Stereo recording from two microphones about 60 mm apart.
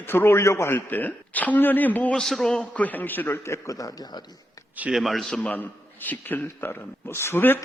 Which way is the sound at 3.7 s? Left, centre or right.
Left.